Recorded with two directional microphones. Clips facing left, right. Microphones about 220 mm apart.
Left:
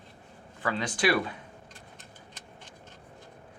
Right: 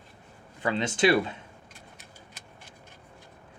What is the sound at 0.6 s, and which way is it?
Speech, 25° right (ahead or behind).